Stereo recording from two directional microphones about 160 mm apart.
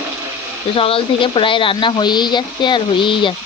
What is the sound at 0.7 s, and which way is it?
Speech, 35° left (ahead or behind).